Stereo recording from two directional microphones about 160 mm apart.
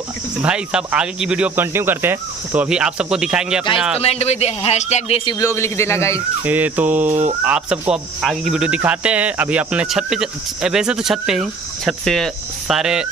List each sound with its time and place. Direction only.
0.4 s speech: 5° right (ahead or behind)
4.0 s a man's voice: 40° left (ahead or behind)
5.4 s a man's voice: 15° left (ahead or behind)
6.4 s a sound: 10° right (ahead or behind)
7.1 s fowl: 50° right (ahead or behind)
7.4 s speech: 10° right (ahead or behind)